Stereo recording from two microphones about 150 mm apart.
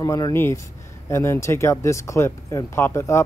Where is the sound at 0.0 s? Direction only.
25° left (ahead or behind).